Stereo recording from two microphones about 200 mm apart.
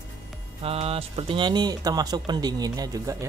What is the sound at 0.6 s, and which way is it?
Speech, 30° right (ahead or behind).